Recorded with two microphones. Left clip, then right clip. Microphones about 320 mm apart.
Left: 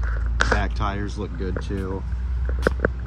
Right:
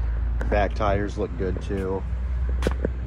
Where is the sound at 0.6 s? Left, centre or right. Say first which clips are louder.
Right 5 dB; centre.